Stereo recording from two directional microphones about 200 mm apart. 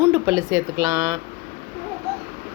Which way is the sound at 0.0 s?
15° right (ahead or behind).